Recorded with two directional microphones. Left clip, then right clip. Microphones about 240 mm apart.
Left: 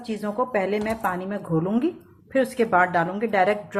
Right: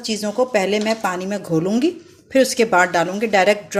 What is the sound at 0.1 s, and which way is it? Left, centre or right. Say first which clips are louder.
A woman's voice: right 6 dB; right.